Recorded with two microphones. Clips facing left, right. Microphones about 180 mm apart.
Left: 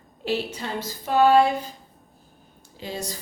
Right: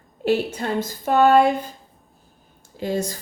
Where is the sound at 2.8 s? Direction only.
50° right (ahead or behind).